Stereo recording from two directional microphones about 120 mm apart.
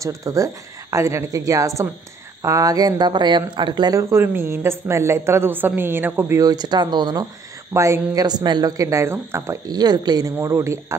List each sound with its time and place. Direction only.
0.0 s speech: 25° right (ahead or behind)
6.4 s speech: 35° right (ahead or behind)
7.7 s speech: 25° right (ahead or behind)
9.7 s speech: 35° right (ahead or behind)
10.4 s speech: 25° right (ahead or behind)